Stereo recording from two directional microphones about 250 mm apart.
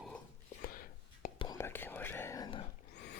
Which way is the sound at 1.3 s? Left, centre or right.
Centre.